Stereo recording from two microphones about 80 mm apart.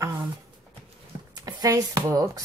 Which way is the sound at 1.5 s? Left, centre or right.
Right.